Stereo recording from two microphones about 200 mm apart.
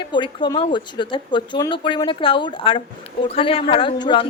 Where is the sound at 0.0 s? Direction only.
25° left (ahead or behind).